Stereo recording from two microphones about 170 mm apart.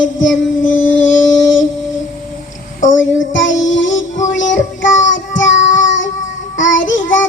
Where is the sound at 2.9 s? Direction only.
90° left.